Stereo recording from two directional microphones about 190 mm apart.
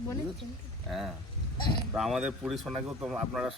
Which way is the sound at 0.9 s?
Centre (ahead or behind).